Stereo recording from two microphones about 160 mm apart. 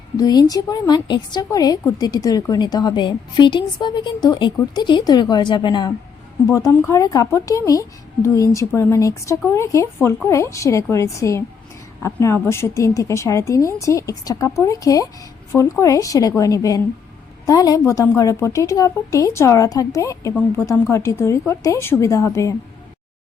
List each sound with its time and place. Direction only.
0.2 s a woman's voice: 25° left (ahead or behind)